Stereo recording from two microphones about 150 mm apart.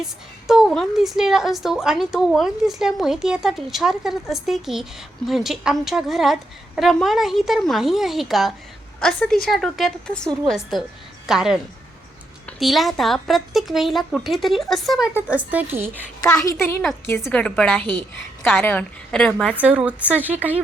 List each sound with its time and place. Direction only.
0.0 s a woman's voice: centre (ahead or behind)
16.4 s a woman's voice: 20° left (ahead or behind)
17.2 s a woman's voice: 5° left (ahead or behind)
19.5 s speech: 10° right (ahead or behind)